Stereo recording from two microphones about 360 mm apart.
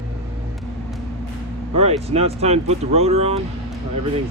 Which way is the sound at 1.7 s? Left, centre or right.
Centre.